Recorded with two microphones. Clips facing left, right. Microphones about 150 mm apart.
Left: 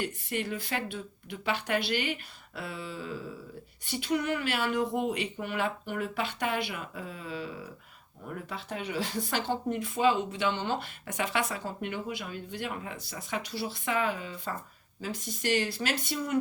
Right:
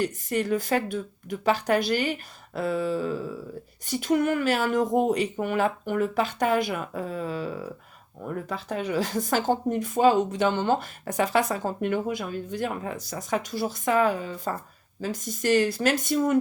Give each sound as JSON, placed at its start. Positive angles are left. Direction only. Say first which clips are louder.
{"t": 0.0, "sound": "speech", "louder": "right 7 dB", "side_deg": -40}